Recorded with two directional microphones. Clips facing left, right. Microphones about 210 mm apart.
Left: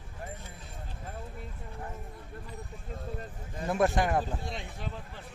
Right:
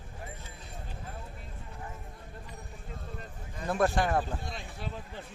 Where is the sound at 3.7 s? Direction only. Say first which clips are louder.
Left 1 dB; 20° left (ahead or behind).